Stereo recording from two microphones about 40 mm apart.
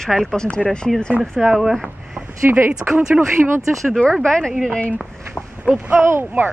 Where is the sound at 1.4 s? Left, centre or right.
Centre.